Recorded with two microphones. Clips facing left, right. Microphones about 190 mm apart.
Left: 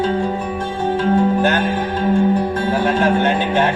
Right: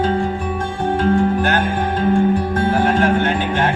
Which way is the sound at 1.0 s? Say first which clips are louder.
Left 1 dB; 50° right (ahead or behind).